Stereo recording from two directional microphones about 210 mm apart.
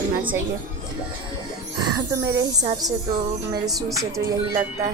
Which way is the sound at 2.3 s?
15° right (ahead or behind).